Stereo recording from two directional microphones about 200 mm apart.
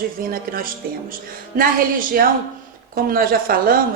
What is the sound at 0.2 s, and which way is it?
A woman's voice, 45° right (ahead or behind).